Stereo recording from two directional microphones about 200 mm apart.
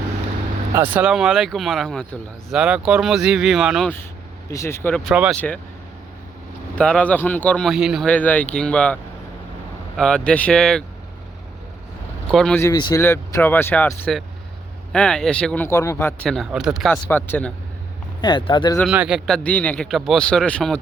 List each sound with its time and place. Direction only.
0.8 s speech: 5° right (ahead or behind)
4.4 s speech: 15° left (ahead or behind)
5.1 s speech: 5° right (ahead or behind)
6.7 s speech: 5° left (ahead or behind)
10.0 s speech: 5° left (ahead or behind)
12.3 s speech: 5° left (ahead or behind)
12.6 s speech: 20° left (ahead or behind)
18.2 s speech: 25° left (ahead or behind)
18.9 s speech: 5° right (ahead or behind)